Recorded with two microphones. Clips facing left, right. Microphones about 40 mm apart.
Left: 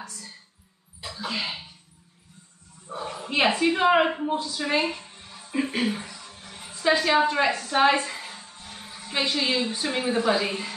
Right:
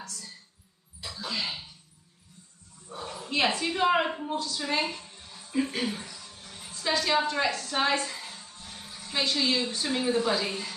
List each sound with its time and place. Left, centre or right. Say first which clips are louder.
0.0 s speech: left 2 dB; centre
2.9 s speech: left 4 dB; left